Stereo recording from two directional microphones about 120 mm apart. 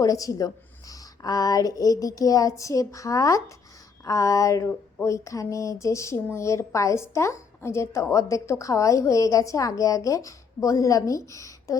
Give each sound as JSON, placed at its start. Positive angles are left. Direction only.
{"t": 0.0, "sound": "a woman's voice", "side_deg": 30}